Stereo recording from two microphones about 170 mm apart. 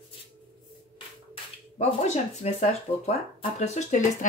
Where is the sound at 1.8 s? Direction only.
40° left (ahead or behind).